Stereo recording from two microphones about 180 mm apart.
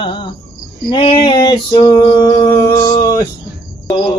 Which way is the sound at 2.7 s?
20° left (ahead or behind).